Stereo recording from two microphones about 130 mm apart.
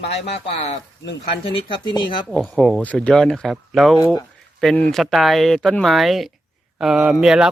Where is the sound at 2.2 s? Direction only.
5° left (ahead or behind).